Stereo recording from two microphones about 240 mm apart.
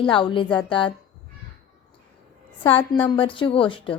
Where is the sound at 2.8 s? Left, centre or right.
Centre.